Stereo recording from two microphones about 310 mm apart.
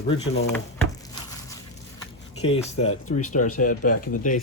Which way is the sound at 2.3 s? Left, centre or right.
Left.